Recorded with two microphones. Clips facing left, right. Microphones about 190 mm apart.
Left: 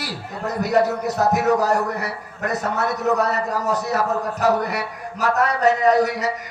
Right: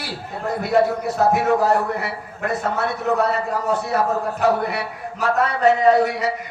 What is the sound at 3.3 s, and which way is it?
Speech, 30° right (ahead or behind).